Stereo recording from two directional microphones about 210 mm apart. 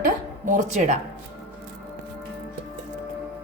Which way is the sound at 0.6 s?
35° right (ahead or behind).